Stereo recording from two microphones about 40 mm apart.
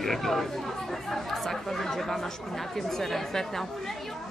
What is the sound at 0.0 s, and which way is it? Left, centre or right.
Speech, centre.